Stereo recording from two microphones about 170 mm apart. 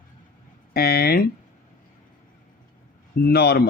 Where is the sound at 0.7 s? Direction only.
65° left (ahead or behind).